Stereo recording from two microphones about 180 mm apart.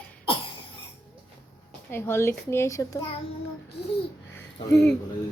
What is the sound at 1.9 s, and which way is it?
A child's voice, 15° left (ahead or behind).